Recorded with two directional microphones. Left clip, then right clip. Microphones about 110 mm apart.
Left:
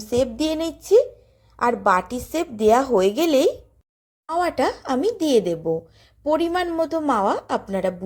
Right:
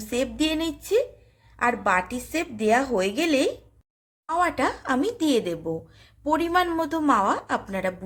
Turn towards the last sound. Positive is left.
turn(degrees=40)  # may be behind; listen again after turning